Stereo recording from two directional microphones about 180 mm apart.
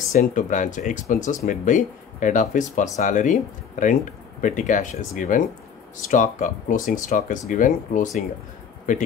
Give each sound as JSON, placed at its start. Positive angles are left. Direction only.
{"t": 0.1, "sound": "speech", "side_deg": 45}